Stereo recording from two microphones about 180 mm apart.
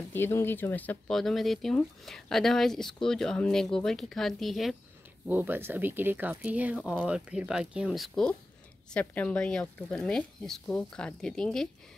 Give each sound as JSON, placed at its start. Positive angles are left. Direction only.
{"t": 0.1, "sound": "speech", "side_deg": 15}